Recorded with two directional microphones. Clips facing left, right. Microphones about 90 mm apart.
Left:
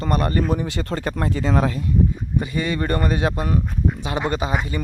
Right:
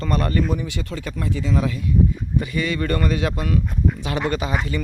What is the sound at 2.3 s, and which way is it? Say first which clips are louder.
Speech: left 1 dB; 25° left (ahead or behind).